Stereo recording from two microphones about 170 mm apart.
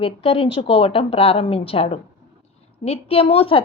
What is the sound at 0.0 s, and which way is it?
A woman's voice, 30° left (ahead or behind).